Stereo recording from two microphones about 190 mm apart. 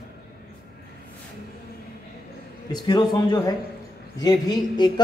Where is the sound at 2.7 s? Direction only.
20° left (ahead or behind).